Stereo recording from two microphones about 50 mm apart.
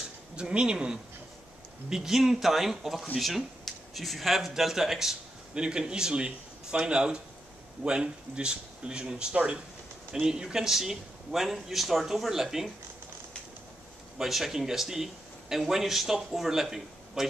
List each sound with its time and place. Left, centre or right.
0.4 s speech: centre
14.1 s speech: centre